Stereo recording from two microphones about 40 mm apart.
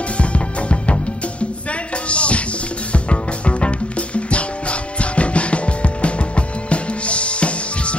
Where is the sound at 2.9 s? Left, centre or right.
Left.